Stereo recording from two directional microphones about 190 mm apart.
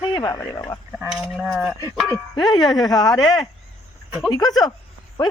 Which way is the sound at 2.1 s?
20° left (ahead or behind).